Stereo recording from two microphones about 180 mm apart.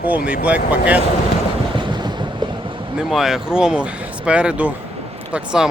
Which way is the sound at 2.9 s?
Centre (ahead or behind).